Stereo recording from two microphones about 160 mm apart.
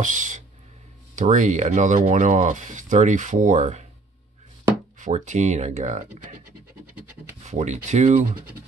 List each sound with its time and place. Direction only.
0.0 s speech: 50° right (ahead or behind)
4.9 s speech: 50° right (ahead or behind)
7.4 s speech: 45° right (ahead or behind)